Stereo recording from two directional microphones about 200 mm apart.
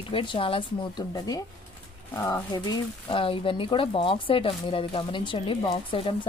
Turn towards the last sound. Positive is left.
turn(degrees=25)  # may be behind; listen again after turning